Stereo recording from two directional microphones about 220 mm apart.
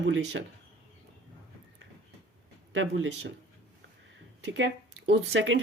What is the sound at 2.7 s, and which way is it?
Speech, 60° right (ahead or behind).